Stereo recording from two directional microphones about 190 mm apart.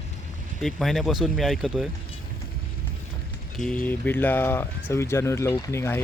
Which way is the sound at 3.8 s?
10° left (ahead or behind).